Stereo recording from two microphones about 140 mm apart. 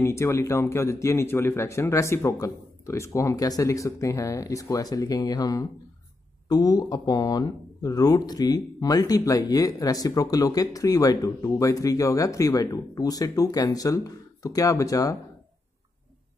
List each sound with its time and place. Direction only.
0.0 s speech: 20° left (ahead or behind)